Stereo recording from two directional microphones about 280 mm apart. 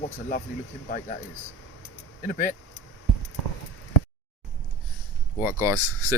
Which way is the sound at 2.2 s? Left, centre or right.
Left.